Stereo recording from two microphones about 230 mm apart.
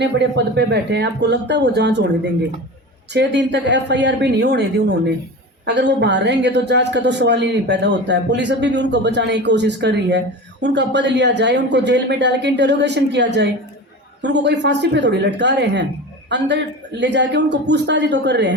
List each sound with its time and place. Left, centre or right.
0.0 s a woman's voice: right
5.6 s a woman's voice: right
17.0 s a woman's voice: right